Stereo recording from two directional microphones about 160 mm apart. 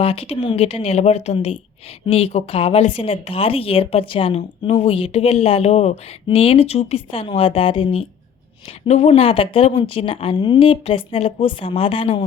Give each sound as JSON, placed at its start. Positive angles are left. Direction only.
{"t": 0.0, "sound": "speech", "side_deg": 40}